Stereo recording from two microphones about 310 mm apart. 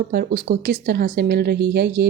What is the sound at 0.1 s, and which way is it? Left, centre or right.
Speech, right.